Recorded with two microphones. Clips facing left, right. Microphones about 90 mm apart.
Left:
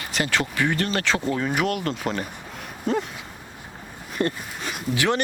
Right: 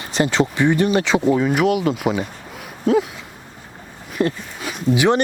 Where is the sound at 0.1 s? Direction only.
25° right (ahead or behind).